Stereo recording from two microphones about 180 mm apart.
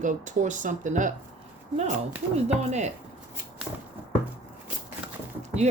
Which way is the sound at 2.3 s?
40° right (ahead or behind).